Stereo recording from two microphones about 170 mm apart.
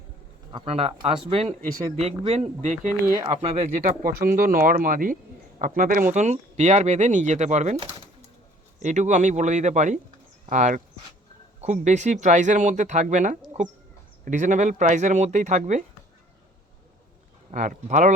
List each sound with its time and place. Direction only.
0.5 s speech: 35° right (ahead or behind)
3.8 s speech: 55° right (ahead or behind)
6.1 s speech: 45° right (ahead or behind)
17.5 s speech: 50° right (ahead or behind)